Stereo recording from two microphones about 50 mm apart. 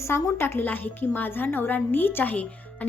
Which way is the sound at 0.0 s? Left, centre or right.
Left.